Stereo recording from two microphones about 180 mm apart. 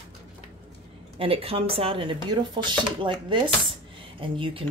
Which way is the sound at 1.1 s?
30° right (ahead or behind).